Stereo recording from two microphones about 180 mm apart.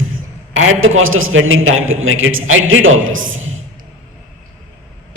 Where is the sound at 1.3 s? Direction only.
90° right.